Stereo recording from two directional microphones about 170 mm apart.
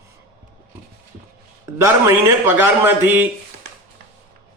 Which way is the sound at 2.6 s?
10° right (ahead or behind).